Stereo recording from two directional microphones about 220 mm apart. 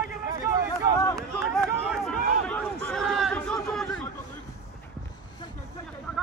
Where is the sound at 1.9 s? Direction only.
5° left (ahead or behind).